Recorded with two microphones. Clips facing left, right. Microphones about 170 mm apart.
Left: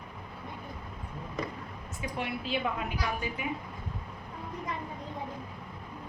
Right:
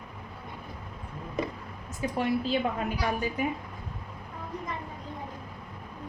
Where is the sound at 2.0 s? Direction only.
40° right (ahead or behind).